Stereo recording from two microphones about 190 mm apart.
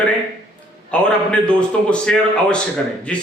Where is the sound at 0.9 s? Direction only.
5° left (ahead or behind).